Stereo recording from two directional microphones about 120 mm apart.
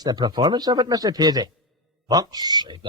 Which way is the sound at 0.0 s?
35° right (ahead or behind).